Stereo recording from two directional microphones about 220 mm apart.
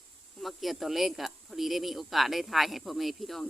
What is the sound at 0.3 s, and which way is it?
Speech, centre (ahead or behind).